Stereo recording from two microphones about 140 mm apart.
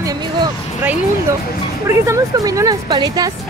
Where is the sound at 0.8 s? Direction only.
10° right (ahead or behind).